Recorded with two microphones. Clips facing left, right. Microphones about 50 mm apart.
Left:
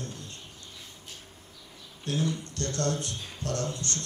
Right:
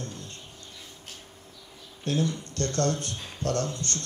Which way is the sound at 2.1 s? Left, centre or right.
Right.